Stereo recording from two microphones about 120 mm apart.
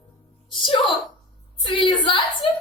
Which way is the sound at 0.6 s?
45° left (ahead or behind).